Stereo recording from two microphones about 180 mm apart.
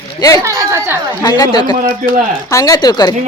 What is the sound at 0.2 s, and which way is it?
Speech, 20° left (ahead or behind).